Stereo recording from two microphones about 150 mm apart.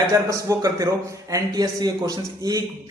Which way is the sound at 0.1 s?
20° right (ahead or behind).